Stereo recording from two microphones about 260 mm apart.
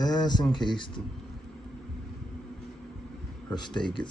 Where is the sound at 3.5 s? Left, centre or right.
Centre.